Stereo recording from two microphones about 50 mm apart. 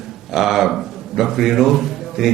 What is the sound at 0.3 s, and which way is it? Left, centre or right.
A man's voice, centre.